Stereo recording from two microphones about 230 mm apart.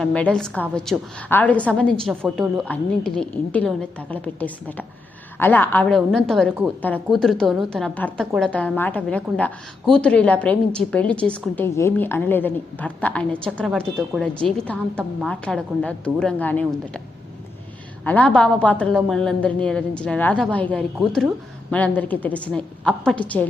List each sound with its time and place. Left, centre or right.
0.0 s a woman's voice: centre
18.0 s a woman's voice: centre